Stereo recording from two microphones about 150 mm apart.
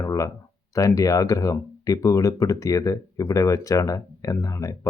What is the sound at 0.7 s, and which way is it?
Speech, 20° left (ahead or behind).